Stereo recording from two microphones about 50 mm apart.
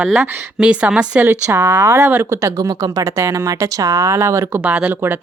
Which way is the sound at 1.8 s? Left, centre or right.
Right.